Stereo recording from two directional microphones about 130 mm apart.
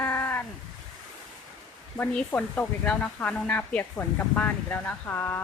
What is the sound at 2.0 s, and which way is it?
Speech, 10° left (ahead or behind).